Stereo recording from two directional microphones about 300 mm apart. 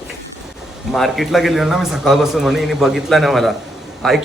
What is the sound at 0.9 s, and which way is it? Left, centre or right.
A man's voice, centre.